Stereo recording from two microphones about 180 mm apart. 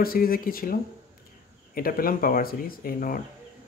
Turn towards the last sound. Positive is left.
turn(degrees=50)  # may be behind; listen again after turning